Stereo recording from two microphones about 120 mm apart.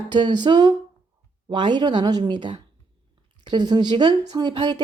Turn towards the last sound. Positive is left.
turn(degrees=-40)  # may be behind; listen again after turning